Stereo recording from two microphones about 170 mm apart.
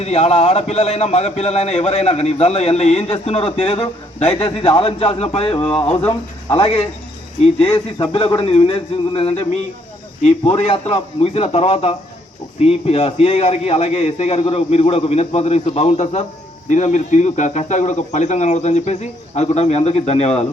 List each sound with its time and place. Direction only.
0.0 s a man's voice: 40° left (ahead or behind)